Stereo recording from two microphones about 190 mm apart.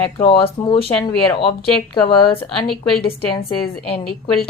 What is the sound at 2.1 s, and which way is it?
Speech, 25° left (ahead or behind).